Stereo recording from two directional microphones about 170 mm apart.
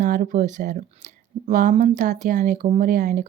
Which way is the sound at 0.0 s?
50° right (ahead or behind).